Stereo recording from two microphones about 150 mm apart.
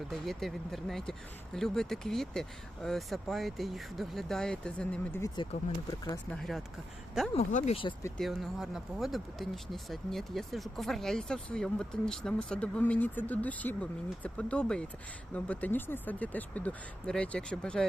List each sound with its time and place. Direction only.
0.1 s speech: centre (ahead or behind)
6.3 s speech: centre (ahead or behind)
7.3 s speech: 45° left (ahead or behind)
8.2 s speech: centre (ahead or behind)